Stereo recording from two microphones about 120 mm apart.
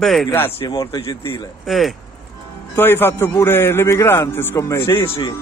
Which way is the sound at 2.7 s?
20° left (ahead or behind).